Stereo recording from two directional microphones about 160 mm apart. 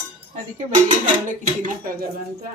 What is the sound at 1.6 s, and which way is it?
Speech, 60° right (ahead or behind).